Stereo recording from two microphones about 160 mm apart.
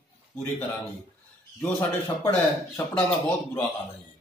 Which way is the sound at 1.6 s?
15° left (ahead or behind).